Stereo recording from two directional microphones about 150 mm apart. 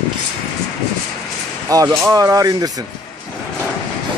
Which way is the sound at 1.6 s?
25° right (ahead or behind).